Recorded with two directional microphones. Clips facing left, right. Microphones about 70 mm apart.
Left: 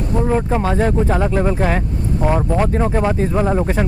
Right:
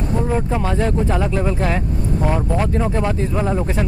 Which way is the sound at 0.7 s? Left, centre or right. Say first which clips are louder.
Left 2 dB; left.